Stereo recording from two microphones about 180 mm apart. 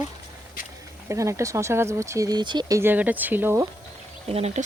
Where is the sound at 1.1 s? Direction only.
15° right (ahead or behind).